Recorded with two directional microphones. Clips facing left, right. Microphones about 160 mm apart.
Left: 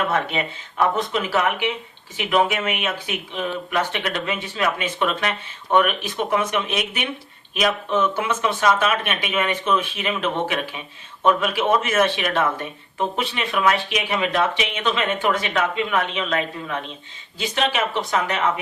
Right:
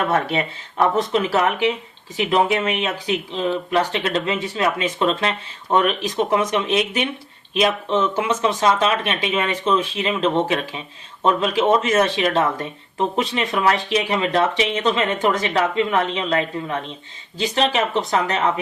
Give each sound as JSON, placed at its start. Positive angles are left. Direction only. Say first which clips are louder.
{"t": 0.1, "sound": "speech", "louder": "right 3 dB", "side_deg": -35}